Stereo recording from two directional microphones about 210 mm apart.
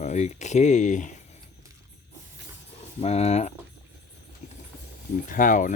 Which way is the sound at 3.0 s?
30° left (ahead or behind).